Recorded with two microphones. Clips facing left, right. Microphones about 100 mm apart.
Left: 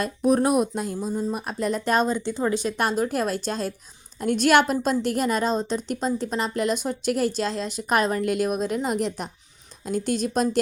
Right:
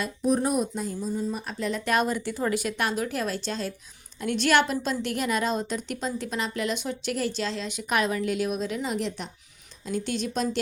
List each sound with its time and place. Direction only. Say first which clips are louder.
0.0 s speech: left 4 dB; 60° left (ahead or behind); by 2.7 s 25° left (ahead or behind)
2.7 s a woman's voice: left 4 dB; 40° left (ahead or behind)
8.2 s speech: left 4 dB; 50° left (ahead or behind)